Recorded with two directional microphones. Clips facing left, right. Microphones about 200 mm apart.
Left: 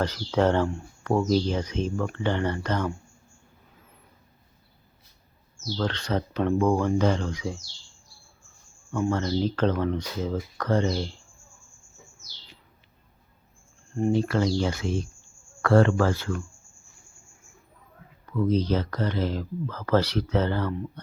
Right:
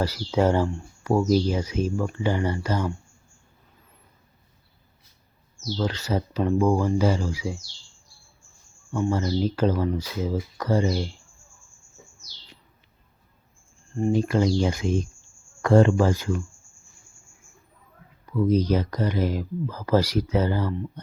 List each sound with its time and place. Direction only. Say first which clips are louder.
0.0 s speech: right 1 dB; 10° right (ahead or behind)
5.7 s speech: right 1 dB; 5° right (ahead or behind)
8.9 s speech: right 1 dB; 10° right (ahead or behind)
14.1 s speech: right 2 dB; 15° right (ahead or behind)
18.3 s speech: right 2 dB; 10° right (ahead or behind)